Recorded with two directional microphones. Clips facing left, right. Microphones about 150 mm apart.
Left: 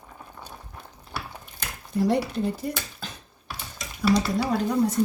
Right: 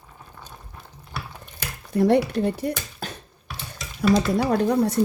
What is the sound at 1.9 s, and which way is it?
Speech, 65° right (ahead or behind).